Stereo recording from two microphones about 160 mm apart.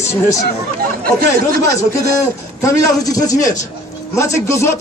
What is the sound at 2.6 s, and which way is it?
Speech, 20° left (ahead or behind).